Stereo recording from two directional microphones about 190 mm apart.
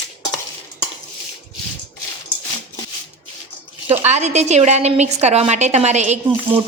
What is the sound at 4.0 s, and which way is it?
A woman's voice, 35° right (ahead or behind).